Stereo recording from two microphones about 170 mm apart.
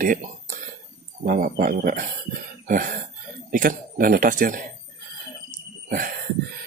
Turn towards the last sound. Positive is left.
turn(degrees=-50)  # may be behind; listen again after turning